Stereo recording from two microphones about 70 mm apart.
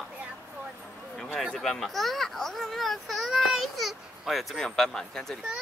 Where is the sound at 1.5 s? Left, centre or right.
Centre.